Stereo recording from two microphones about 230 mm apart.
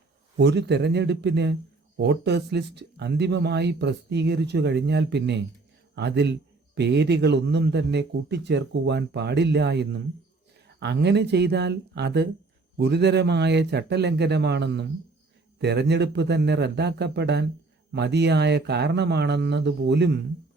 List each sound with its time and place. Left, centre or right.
0.3 s speech: right